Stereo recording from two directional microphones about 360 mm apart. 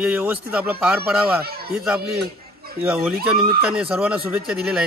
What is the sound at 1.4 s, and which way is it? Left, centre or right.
Speech, right.